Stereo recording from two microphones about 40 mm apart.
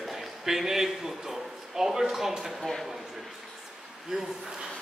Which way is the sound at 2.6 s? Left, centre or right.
Centre.